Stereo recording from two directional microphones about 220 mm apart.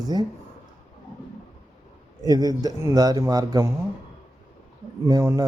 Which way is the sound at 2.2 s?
15° right (ahead or behind).